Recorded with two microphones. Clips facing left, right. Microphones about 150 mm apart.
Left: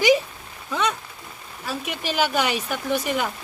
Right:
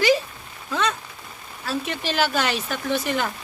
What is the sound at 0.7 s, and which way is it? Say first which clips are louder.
Rain: even; 15° left (ahead or behind).